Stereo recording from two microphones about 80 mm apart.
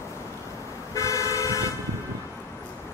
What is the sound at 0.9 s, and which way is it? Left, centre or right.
Vehicle, left.